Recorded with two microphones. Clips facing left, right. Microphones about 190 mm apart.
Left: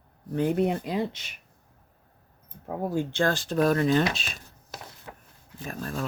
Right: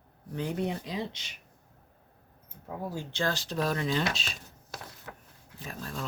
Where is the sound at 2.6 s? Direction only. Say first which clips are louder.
Left 8 dB; 55° left (ahead or behind).